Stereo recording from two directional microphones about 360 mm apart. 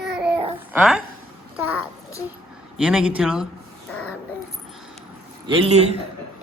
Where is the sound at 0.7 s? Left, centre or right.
Centre.